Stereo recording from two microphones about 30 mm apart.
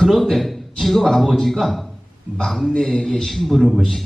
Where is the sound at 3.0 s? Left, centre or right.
Centre.